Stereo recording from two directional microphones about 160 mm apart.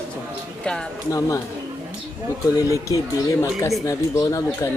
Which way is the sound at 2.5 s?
20° left (ahead or behind).